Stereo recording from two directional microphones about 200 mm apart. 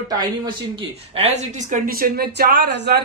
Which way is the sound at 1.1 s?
35° right (ahead or behind).